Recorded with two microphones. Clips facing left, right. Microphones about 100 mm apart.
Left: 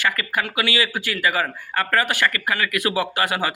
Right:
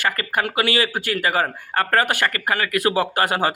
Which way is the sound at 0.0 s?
45° right (ahead or behind).